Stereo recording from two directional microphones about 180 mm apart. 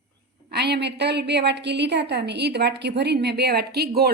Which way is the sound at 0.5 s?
65° right (ahead or behind).